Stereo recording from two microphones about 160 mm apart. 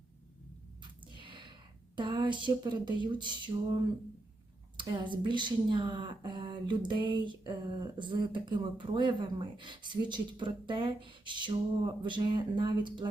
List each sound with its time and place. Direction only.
1.1 s a sound: 30° right (ahead or behind)
2.0 s speech: 30° right (ahead or behind)
4.8 s speech: 30° right (ahead or behind)